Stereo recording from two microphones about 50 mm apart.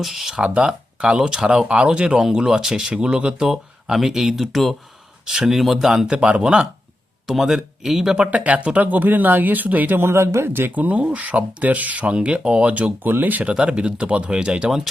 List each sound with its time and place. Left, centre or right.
0.0 s speech: centre
0.3 s speech: centre
3.4 s speech: centre
5.2 s speech: centre
6.1 s speech: centre
7.3 s speech: centre
8.3 s speech: right
10.0 s speech: right
10.8 s speech: right
13.0 s speech: right
13.4 s speech: right